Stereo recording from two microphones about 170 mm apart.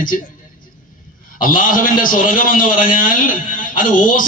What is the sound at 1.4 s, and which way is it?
A man's voice, 55° left (ahead or behind).